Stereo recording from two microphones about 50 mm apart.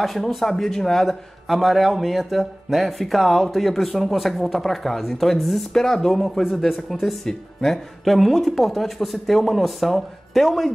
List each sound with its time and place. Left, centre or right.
0.0 s a man's voice: centre